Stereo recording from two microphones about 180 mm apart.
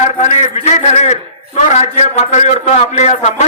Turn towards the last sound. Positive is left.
turn(degrees=40)  # may be behind; listen again after turning